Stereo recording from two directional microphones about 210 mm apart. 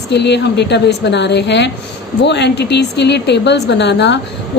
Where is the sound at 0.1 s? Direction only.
55° left (ahead or behind).